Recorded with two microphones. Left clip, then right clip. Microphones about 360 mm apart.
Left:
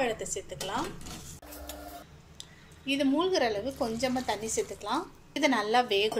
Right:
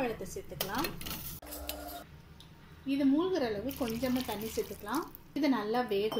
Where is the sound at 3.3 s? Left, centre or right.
Left.